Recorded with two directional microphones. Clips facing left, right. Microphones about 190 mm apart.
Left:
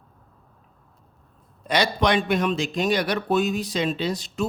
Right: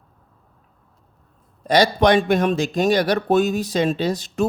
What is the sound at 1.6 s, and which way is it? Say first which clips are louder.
A man's voice: right 6 dB; 40° right (ahead or behind).